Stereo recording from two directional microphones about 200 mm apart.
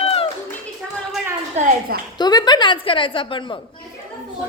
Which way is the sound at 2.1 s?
20° left (ahead or behind).